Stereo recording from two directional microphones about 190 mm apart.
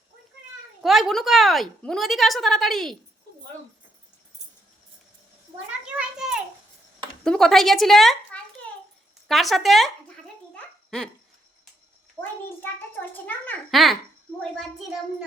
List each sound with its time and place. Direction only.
0.8 s a woman's voice: centre (ahead or behind)
5.8 s a sound: 5° right (ahead or behind)
7.3 s a woman's voice: centre (ahead or behind)
10.9 s a woman's voice: 5° left (ahead or behind)
13.2 s a woman's voice: 10° left (ahead or behind)